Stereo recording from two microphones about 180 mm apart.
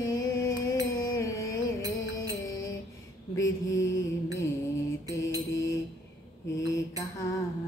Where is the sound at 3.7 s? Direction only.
20° left (ahead or behind).